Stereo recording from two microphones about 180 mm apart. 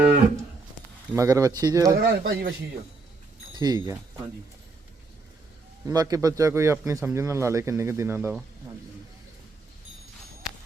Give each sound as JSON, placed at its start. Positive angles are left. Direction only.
{"t": 1.1, "sound": "speech", "side_deg": -20}
{"t": 2.0, "sound": "speech", "side_deg": -55}
{"t": 3.5, "sound": "speech", "side_deg": -20}
{"t": 5.8, "sound": "a man's voice", "side_deg": -20}